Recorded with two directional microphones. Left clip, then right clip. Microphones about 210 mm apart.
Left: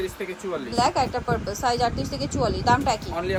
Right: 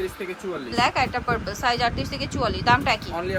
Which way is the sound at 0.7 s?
15° left (ahead or behind).